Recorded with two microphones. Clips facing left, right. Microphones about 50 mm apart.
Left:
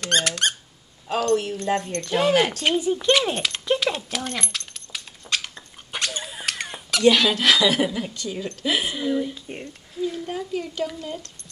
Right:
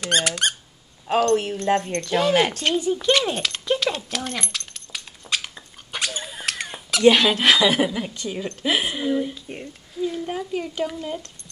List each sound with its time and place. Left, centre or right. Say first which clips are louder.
0.0 s squeak: right 1 dB; centre
1.3 s speech: right 2 dB; right
2.0 s speech: left 3 dB; centre
5.9 s a sound: even; centre
7.0 s speech: right 2 dB; right
9.3 s speech: even; centre
10.2 s speech: right 1 dB; right